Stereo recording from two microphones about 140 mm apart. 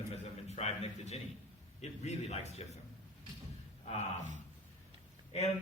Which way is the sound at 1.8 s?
50° left (ahead or behind).